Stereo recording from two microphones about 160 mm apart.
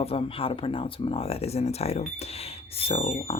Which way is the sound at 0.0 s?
35° left (ahead or behind).